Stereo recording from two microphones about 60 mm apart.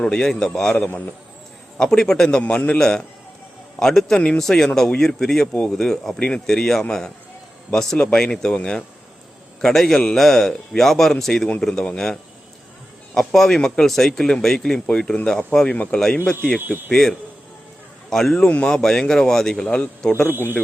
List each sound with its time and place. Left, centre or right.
0.0 s speech: centre
1.8 s speech: centre
2.4 s a man's voice: left
3.8 s a man's voice: centre
16.6 s speech: right
16.9 s speech: centre